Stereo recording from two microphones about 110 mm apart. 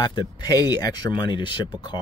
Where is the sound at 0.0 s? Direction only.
40° left (ahead or behind).